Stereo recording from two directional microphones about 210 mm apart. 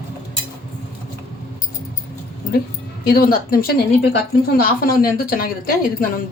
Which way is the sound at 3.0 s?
45° left (ahead or behind).